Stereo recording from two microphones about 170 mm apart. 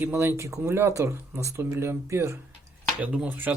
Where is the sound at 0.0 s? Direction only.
15° right (ahead or behind).